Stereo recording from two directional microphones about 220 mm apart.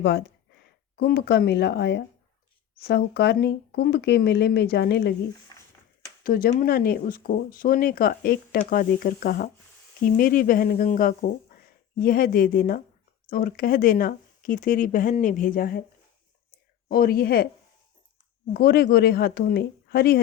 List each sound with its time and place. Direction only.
0.0 s speech: 50° left (ahead or behind)
6.2 s speech: 40° left (ahead or behind)
16.9 s speech: 45° left (ahead or behind)
18.5 s speech: 45° left (ahead or behind)